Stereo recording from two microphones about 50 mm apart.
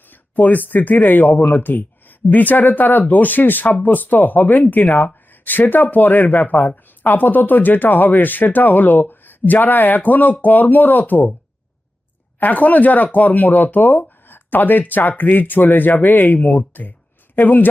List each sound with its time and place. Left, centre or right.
0.1 s speech: left
12.4 s speech: left